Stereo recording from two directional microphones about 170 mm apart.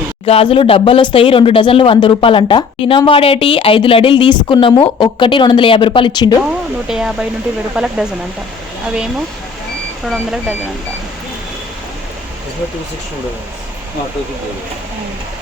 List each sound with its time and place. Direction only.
0.3 s a woman's voice: 35° left (ahead or behind)
6.8 s speech: 5° right (ahead or behind)
10.1 s speech: 5° right (ahead or behind)